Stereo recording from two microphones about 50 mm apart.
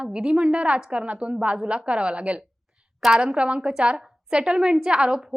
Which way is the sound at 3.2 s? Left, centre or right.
Right.